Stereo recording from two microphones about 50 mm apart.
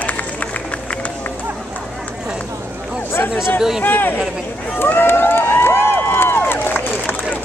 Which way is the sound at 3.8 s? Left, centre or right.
Left.